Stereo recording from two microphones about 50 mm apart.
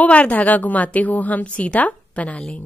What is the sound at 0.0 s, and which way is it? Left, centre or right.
A woman's voice, left.